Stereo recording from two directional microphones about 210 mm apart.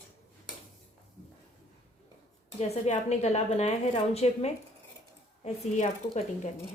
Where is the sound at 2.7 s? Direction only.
30° left (ahead or behind).